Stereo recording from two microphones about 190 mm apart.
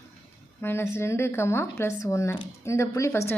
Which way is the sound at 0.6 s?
10° left (ahead or behind).